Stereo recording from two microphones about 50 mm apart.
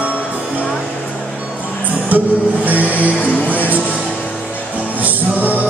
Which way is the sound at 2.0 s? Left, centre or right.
Right.